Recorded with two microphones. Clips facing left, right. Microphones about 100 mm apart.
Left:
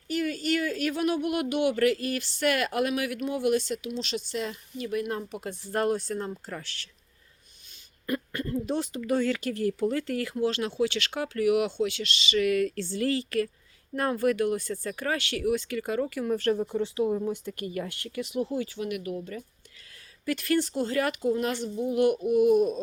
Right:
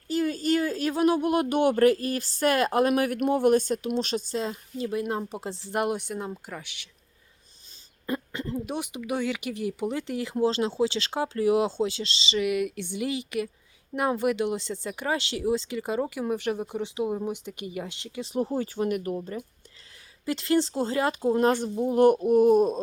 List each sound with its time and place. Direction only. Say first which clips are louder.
0.1 s speech: right 3 dB; 30° right (ahead or behind)
4.8 s speech: right 2 dB; 25° right (ahead or behind)
8.0 s speech: even; 20° right (ahead or behind)
18.3 s speech: right 3 dB; 45° right (ahead or behind)
20.2 s speech: right 2 dB; 25° right (ahead or behind)
21.2 s speech: right 4 dB; 40° right (ahead or behind)